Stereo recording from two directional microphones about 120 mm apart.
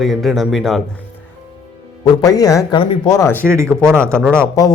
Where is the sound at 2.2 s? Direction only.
30° left (ahead or behind).